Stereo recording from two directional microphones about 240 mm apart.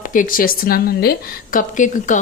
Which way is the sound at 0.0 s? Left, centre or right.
Left.